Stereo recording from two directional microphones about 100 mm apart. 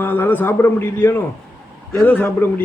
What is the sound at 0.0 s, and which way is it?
A man's voice, 20° left (ahead or behind).